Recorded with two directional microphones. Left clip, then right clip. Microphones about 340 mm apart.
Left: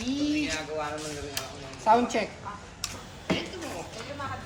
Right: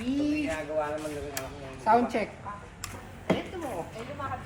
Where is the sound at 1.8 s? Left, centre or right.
Centre.